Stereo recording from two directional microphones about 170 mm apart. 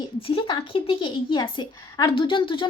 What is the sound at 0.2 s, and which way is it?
A woman's voice, 30° left (ahead or behind).